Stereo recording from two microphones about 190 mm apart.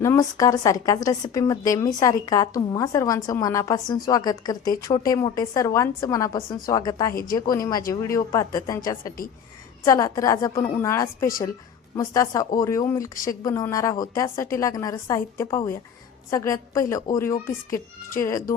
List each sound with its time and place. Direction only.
0.0 s a woman's voice: 15° left (ahead or behind)
7.1 s speech: 50° left (ahead or behind)
7.3 s a woman's voice: 20° left (ahead or behind)